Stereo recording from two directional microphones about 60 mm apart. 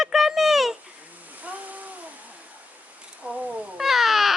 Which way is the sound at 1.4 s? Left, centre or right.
Right.